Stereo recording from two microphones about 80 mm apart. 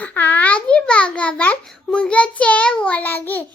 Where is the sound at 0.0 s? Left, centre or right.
Centre.